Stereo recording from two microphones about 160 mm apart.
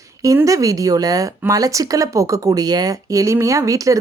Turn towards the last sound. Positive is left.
turn(degrees=-20)  # may be behind; listen again after turning